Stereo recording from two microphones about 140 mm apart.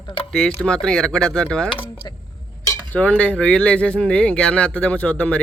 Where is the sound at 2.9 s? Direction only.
10° left (ahead or behind).